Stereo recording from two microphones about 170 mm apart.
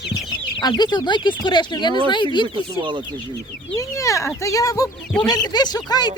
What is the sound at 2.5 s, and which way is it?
Speech, 30° right (ahead or behind).